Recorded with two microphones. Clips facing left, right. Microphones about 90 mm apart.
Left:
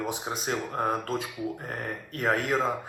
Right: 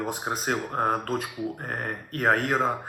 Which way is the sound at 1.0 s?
50° right (ahead or behind).